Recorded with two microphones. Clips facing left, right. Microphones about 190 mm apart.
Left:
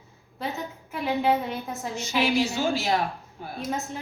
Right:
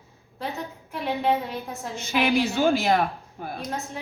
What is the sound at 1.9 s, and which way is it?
A woman's voice, 55° right (ahead or behind).